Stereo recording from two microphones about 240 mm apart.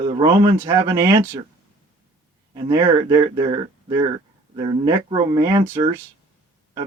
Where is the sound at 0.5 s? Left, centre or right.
Centre.